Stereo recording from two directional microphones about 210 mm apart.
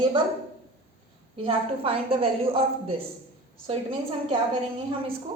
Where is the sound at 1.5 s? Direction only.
25° right (ahead or behind).